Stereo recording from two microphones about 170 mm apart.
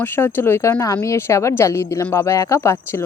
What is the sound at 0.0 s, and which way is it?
Speech, 15° left (ahead or behind).